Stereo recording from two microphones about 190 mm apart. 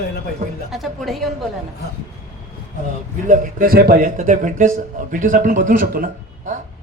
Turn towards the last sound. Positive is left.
turn(degrees=-45)  # may be behind; listen again after turning